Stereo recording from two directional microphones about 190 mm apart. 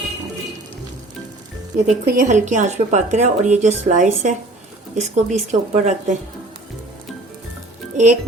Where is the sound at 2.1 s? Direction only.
45° right (ahead or behind).